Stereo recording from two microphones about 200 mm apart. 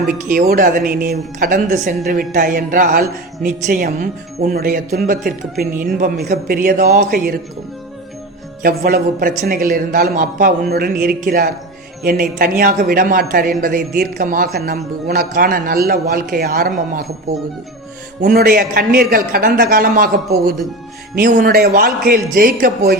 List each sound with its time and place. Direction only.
0.3 s a woman's voice: 45° right (ahead or behind)
8.6 s a woman's voice: 45° right (ahead or behind)
18.2 s a woman's voice: 45° right (ahead or behind)
21.2 s a woman's voice: 45° right (ahead or behind)